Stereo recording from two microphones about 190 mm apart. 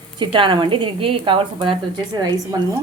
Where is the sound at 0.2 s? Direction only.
25° right (ahead or behind).